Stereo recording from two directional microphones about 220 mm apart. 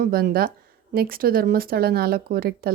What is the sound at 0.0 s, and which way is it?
A woman's voice, 45° right (ahead or behind).